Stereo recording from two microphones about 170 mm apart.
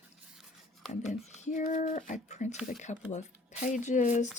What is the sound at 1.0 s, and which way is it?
Speech, 45° left (ahead or behind).